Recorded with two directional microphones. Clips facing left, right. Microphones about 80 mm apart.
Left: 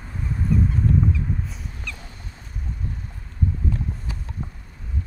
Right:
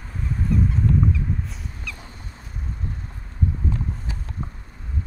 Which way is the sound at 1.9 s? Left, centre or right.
Centre.